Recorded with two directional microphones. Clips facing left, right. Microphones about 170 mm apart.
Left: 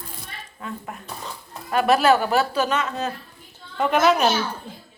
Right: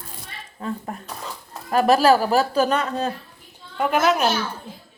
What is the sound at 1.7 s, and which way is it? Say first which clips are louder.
A woman's voice: right 2 dB; 35° right (ahead or behind).